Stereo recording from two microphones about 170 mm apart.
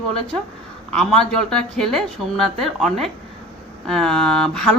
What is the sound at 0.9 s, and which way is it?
Speech, 5° left (ahead or behind).